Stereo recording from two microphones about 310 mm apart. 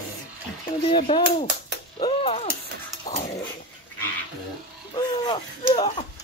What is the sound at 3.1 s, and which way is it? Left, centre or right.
Dog, centre.